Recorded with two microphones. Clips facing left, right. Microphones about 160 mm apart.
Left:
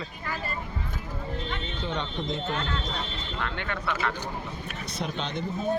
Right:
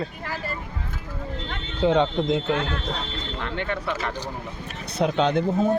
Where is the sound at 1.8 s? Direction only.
85° right.